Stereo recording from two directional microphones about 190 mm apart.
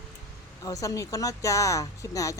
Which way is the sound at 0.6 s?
15° left (ahead or behind).